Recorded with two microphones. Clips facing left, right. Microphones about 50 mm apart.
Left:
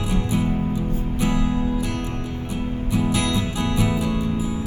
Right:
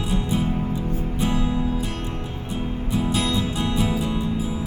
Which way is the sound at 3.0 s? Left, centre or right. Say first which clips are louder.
Left 1 dB; left.